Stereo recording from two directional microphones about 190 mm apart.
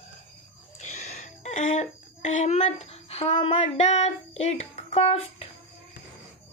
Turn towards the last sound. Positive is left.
turn(degrees=35)  # may be behind; listen again after turning